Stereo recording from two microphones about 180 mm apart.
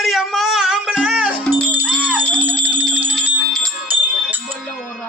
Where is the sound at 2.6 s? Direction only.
10° right (ahead or behind).